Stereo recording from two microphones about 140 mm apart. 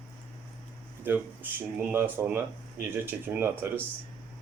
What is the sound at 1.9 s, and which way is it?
Speech, 15° right (ahead or behind).